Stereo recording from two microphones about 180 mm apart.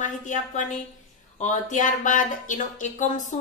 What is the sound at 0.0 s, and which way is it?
Speech, 45° left (ahead or behind).